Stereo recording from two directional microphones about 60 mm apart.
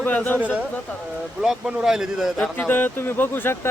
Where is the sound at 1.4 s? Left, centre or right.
Centre.